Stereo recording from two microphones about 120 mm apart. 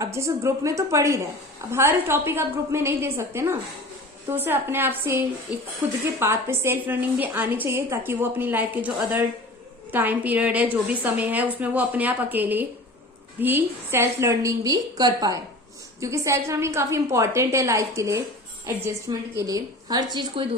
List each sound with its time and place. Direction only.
0.0 s a woman's voice: 25° right (ahead or behind)